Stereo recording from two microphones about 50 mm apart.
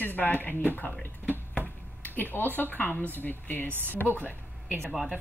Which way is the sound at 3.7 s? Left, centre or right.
Right.